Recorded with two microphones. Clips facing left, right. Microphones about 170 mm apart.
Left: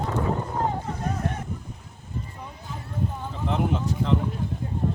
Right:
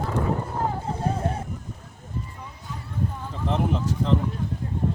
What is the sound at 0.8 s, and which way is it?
Vehicle, 30° right (ahead or behind).